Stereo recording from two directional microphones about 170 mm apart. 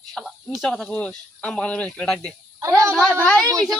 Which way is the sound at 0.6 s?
5° left (ahead or behind).